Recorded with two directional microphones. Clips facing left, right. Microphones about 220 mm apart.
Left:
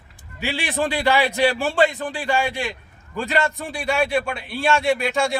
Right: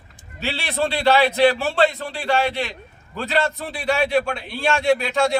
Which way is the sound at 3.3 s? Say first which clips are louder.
Right 1 dB; centre (ahead or behind).